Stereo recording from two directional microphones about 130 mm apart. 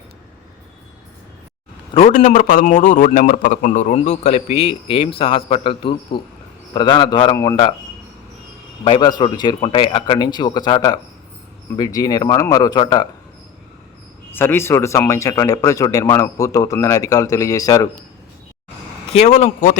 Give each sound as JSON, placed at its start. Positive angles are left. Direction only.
{"t": 1.9, "sound": "a man's voice", "side_deg": 55}
{"t": 2.1, "sound": "a man's voice", "side_deg": 90}
{"t": 8.8, "sound": "a man's voice", "side_deg": 35}
{"t": 14.3, "sound": "speech", "side_deg": 20}
{"t": 19.1, "sound": "a man's voice", "side_deg": 55}